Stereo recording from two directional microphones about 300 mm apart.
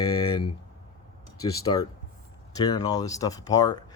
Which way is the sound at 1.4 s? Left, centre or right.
Centre.